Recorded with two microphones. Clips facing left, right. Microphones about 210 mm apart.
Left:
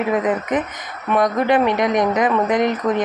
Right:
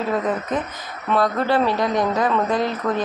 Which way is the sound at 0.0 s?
20° left (ahead or behind).